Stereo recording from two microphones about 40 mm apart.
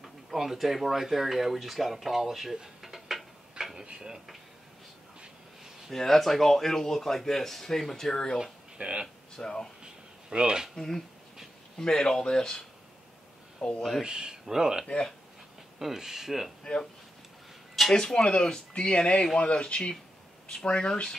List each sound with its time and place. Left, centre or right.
0.0 s speech: centre
3.7 s speech: centre
5.9 s speech: centre
8.7 s speech: right
9.4 s speech: centre
10.3 s speech: right
10.7 s speech: centre
14.0 s speech: centre
17.9 s speech: centre